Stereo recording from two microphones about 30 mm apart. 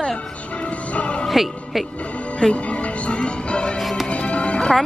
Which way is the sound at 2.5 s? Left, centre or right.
Left.